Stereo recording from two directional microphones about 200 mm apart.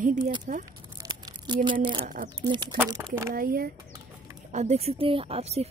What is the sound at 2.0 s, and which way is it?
Speech, 50° right (ahead or behind).